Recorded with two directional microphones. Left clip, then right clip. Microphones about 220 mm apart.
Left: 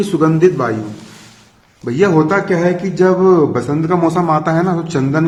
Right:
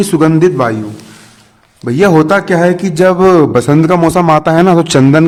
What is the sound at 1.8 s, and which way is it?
A man's voice, 40° right (ahead or behind).